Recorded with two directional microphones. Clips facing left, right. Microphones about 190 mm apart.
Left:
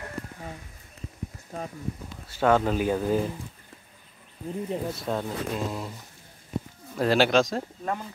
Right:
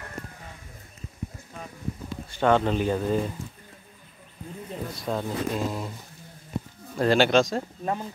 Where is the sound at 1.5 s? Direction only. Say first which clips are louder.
Left 6 dB; 35° left (ahead or behind).